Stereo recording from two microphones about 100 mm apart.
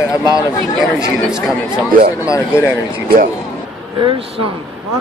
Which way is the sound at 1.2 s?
5° right (ahead or behind).